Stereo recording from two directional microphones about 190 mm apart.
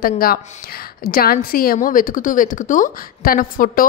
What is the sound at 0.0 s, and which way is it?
A woman's voice, 50° left (ahead or behind).